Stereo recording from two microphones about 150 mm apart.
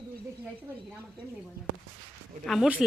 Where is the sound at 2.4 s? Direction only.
Centre (ahead or behind).